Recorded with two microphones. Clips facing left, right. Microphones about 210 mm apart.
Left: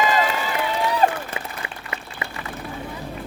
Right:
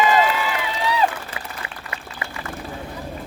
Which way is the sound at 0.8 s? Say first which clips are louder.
Even; 50° left (ahead or behind).